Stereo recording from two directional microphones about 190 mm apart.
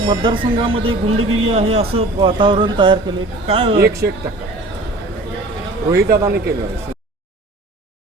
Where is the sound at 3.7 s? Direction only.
55° right (ahead or behind).